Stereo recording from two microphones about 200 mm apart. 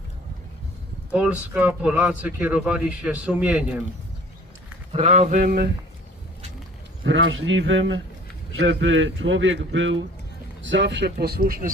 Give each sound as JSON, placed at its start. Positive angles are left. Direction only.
{"t": 1.1, "sound": "speech", "side_deg": -5}
{"t": 4.9, "sound": "speech", "side_deg": -30}
{"t": 5.4, "sound": "speech", "side_deg": -50}
{"t": 7.0, "sound": "a man's voice", "side_deg": -70}